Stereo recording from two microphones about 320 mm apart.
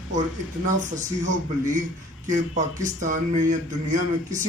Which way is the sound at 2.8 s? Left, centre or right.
Right.